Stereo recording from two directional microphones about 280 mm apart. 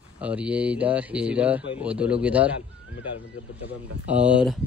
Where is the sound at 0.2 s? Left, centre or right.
Centre.